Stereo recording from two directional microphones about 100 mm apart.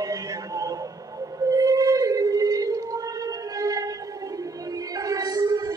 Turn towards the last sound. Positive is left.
turn(degrees=-35)  # may be behind; listen again after turning